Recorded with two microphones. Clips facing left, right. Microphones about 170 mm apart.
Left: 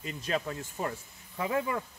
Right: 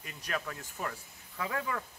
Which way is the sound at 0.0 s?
25° left (ahead or behind).